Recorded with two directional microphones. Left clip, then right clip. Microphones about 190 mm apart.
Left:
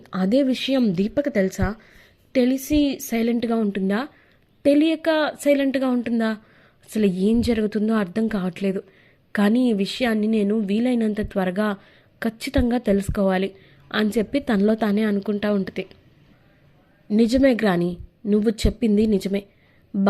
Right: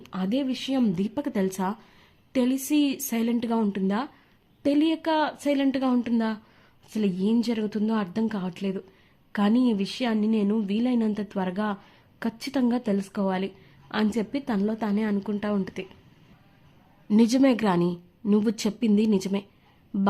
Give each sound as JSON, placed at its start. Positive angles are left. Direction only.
{"t": 0.1, "sound": "speech", "side_deg": 25}
{"t": 0.8, "sound": "a woman's voice", "side_deg": 10}
{"t": 17.1, "sound": "a woman's voice", "side_deg": 5}